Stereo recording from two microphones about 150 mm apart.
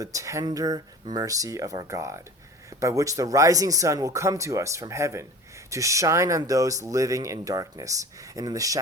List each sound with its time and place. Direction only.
0.0 s speech: 20° right (ahead or behind)